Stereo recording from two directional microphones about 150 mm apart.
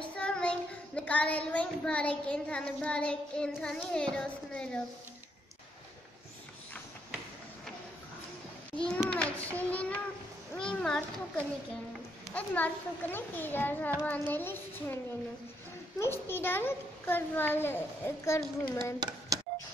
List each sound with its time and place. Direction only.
0.1 s child singing: 5° left (ahead or behind)
8.7 s a child's voice: 5° left (ahead or behind)
16.0 s a child's voice: 15° left (ahead or behind)
18.9 s a sound: 25° right (ahead or behind)